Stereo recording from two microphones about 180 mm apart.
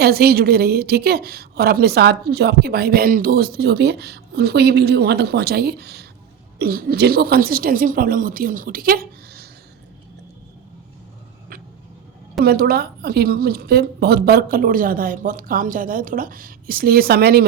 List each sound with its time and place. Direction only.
0.0 s a woman's voice: 60° right (ahead or behind)
12.4 s a woman's voice: 60° right (ahead or behind)